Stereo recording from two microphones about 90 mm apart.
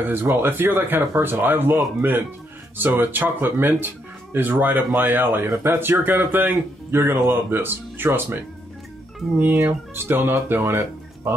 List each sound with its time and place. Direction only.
0.0 s speech: 25° right (ahead or behind)
9.4 s speech: 20° right (ahead or behind)